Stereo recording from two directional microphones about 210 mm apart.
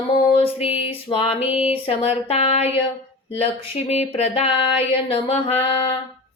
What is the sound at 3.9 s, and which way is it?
Music, 30° left (ahead or behind).